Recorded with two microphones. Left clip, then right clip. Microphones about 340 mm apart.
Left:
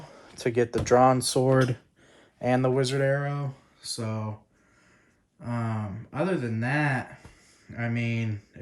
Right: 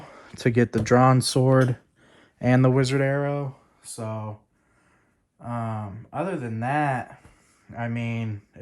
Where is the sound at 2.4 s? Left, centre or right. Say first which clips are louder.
Right 3 dB; right.